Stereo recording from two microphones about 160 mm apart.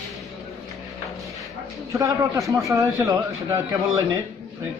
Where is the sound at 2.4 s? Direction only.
Centre (ahead or behind).